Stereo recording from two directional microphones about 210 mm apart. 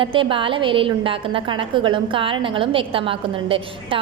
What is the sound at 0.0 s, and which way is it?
A woman's voice, 25° right (ahead or behind).